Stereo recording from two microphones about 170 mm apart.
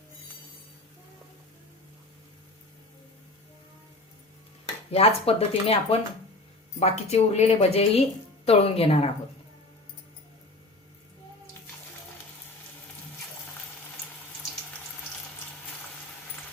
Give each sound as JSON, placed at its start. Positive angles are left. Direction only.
{"t": 4.9, "sound": "speech", "side_deg": 35}